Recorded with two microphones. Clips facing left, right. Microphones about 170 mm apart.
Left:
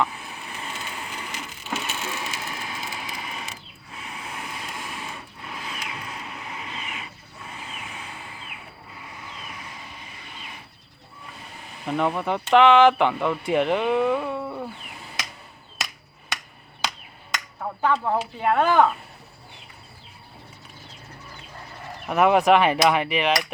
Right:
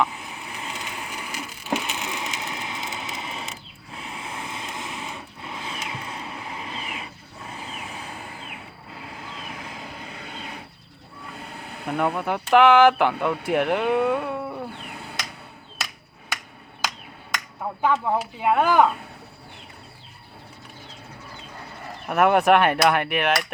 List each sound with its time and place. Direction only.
0.5 s splinter: 15° right (ahead or behind)
3.9 s vehicle: 25° right (ahead or behind)
9.5 s vehicle: 60° right (ahead or behind)
11.3 s a sound: 65° right (ahead or behind)
11.9 s speech: 5° right (ahead or behind)
17.8 s speech: 5° right (ahead or behind)
22.0 s speech: centre (ahead or behind)